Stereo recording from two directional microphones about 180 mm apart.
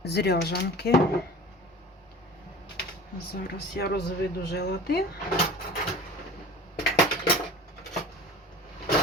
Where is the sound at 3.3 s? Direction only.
60° left (ahead or behind).